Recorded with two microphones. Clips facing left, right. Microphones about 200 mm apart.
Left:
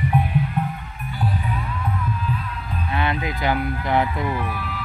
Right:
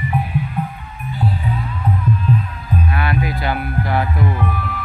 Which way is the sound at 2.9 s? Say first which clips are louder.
Right 3 dB; 20° left (ahead or behind).